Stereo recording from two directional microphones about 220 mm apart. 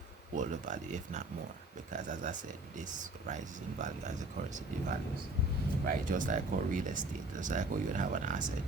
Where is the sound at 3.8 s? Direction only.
35° right (ahead or behind).